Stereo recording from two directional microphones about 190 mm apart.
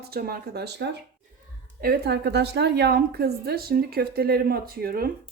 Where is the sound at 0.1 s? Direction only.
55° right (ahead or behind).